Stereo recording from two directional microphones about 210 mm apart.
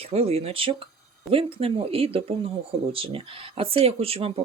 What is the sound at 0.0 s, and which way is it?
Speech, 30° right (ahead or behind).